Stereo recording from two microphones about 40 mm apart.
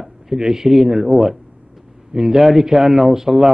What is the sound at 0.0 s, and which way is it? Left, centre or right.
A man's voice, centre.